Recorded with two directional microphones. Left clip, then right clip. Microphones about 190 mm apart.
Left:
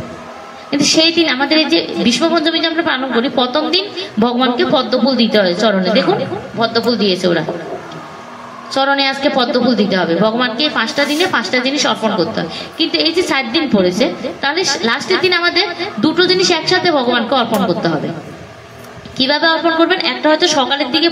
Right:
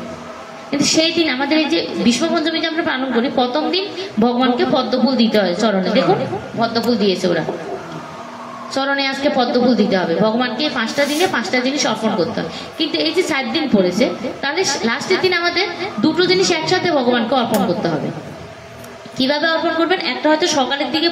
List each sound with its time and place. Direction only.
0.7 s a woman's voice: 45° left (ahead or behind)
8.7 s a woman's voice: 40° left (ahead or behind)
19.1 s a woman's voice: 45° left (ahead or behind)